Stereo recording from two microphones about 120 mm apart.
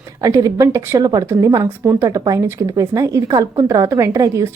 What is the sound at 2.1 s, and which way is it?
Speech, 30° right (ahead or behind).